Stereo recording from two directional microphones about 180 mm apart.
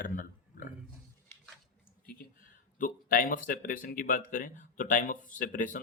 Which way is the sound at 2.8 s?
50° left (ahead or behind).